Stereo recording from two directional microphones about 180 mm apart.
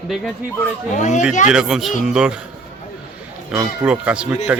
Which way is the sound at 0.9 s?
40° left (ahead or behind).